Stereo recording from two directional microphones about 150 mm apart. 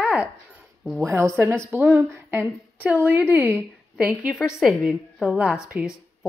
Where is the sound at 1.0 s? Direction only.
20° right (ahead or behind).